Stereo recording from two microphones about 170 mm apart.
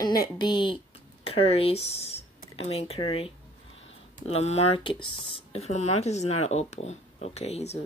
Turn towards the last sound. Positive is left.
turn(degrees=40)  # may be behind; listen again after turning